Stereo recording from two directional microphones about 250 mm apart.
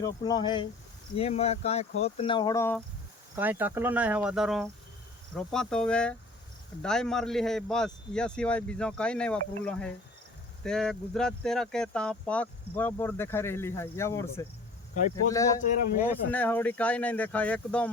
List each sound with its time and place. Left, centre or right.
0.0 s speech: centre
3.3 s a man's voice: centre
15.6 s speech: left
16.3 s a man's voice: centre